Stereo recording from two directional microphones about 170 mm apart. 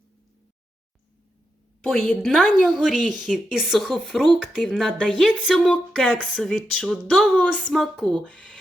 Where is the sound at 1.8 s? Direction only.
5° left (ahead or behind).